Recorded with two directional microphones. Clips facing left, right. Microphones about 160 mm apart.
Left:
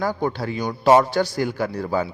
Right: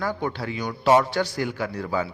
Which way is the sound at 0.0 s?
40° left (ahead or behind).